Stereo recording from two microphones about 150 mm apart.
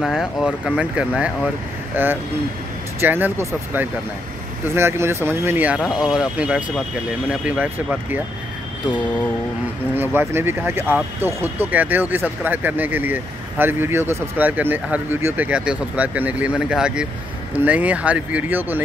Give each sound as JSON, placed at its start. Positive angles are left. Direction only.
{"t": 0.0, "sound": "speech", "side_deg": 0}
{"t": 5.8, "sound": "speech", "side_deg": 0}
{"t": 9.9, "sound": "speech", "side_deg": -15}